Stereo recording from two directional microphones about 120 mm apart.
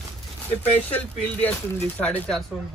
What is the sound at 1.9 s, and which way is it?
Speech, 10° left (ahead or behind).